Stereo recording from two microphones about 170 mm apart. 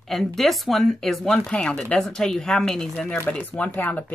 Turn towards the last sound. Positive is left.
turn(degrees=10)  # may be behind; listen again after turning